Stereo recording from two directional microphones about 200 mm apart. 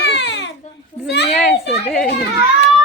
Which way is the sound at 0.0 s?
60° left (ahead or behind).